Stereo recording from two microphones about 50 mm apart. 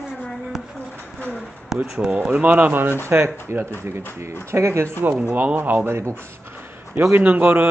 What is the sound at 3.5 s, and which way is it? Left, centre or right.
Speech, right.